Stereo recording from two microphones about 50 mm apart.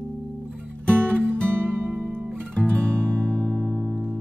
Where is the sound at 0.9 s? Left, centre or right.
Right.